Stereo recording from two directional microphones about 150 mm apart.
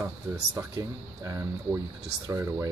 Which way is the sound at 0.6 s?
25° right (ahead or behind).